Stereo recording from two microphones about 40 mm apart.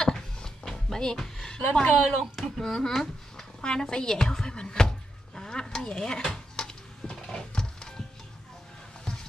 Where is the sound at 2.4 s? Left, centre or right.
Centre.